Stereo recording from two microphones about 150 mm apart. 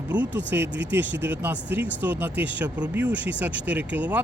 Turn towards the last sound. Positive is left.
turn(degrees=-10)  # may be behind; listen again after turning